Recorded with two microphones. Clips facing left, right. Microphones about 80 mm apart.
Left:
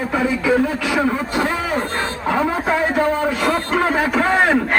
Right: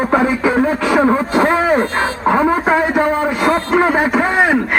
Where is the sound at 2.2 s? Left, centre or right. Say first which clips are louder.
Right 5 dB; right.